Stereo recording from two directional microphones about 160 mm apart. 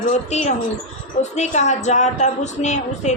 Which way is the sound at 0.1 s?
45° left (ahead or behind).